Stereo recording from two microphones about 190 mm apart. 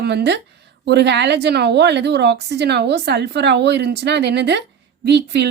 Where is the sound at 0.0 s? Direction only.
60° right (ahead or behind).